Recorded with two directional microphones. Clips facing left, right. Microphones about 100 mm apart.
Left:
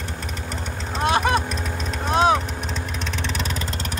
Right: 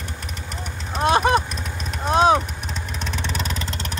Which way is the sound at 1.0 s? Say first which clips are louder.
Right 3 dB; 25° right (ahead or behind).